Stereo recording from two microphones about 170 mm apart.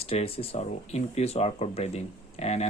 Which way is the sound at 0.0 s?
35° left (ahead or behind).